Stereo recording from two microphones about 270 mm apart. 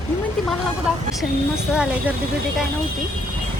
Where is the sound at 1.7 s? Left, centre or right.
Centre.